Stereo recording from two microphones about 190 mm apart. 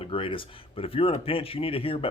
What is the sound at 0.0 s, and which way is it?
Speech, 30° left (ahead or behind).